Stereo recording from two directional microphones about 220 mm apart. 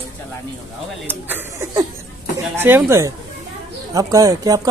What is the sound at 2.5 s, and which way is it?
Speech, 10° right (ahead or behind).